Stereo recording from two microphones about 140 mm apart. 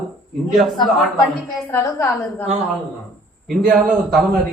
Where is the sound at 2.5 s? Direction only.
10° right (ahead or behind).